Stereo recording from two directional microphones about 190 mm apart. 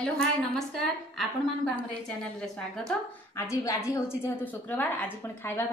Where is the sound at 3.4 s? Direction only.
15° left (ahead or behind).